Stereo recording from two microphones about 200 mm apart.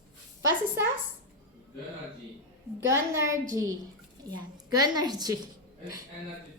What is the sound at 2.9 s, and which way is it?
Speech, 15° right (ahead or behind).